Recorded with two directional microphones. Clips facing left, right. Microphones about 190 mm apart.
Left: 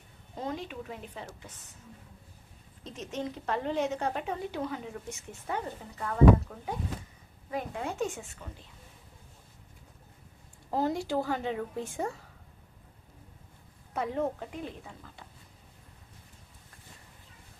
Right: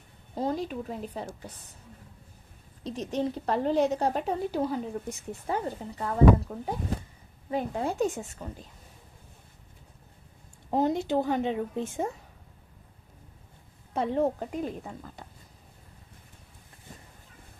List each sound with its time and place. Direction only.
0.3 s a woman's voice: 35° right (ahead or behind)
2.8 s a woman's voice: 35° right (ahead or behind)
10.7 s a woman's voice: 20° right (ahead or behind)
13.9 s a woman's voice: 30° right (ahead or behind)